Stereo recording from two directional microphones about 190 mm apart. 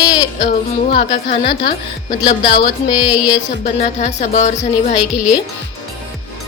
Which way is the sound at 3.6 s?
35° left (ahead or behind).